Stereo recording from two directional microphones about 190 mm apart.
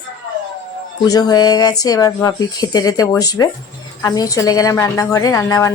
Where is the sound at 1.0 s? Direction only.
20° left (ahead or behind).